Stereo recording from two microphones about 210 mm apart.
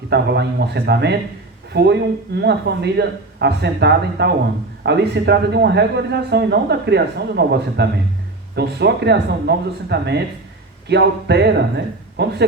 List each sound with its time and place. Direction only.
0.1 s speech: 55° right (ahead or behind)